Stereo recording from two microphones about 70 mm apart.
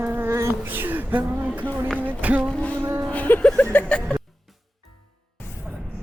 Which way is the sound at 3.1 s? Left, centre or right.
Left.